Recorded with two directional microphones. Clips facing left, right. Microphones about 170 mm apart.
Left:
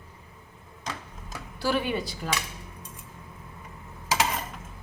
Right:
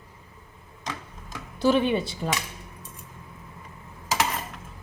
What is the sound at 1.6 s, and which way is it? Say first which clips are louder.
Speech: right 6 dB; 20° right (ahead or behind).